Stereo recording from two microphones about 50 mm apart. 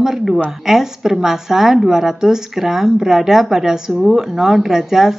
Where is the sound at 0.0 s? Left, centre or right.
Centre.